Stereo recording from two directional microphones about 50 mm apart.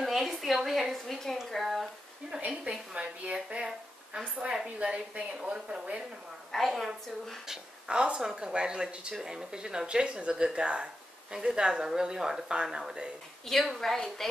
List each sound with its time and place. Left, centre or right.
0.0 s a sound: centre
1.2 s a woman's voice: centre
2.6 s speech: centre
6.5 s a woman's voice: centre
7.4 s speech: centre
13.5 s a woman's voice: centre